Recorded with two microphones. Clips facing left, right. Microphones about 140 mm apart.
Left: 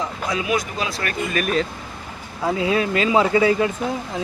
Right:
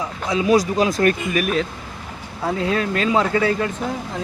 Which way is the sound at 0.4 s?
40° right (ahead or behind).